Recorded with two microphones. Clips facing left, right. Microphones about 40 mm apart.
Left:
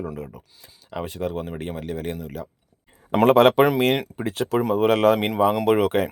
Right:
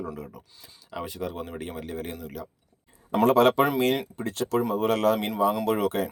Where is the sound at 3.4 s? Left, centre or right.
Left.